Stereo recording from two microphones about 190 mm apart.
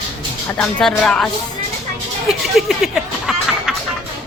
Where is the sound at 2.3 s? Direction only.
Centre (ahead or behind).